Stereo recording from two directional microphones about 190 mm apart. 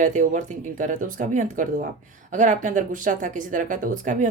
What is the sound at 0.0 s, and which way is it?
Speech, 40° right (ahead or behind).